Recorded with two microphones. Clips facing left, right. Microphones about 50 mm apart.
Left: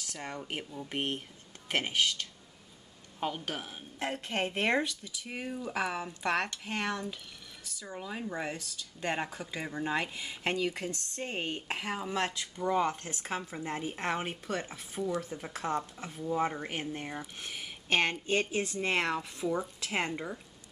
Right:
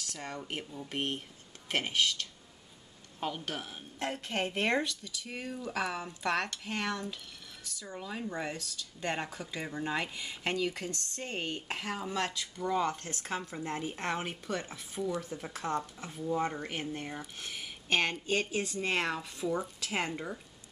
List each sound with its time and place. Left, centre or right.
0.1 s a woman's voice: centre
15.0 s a woman's voice: centre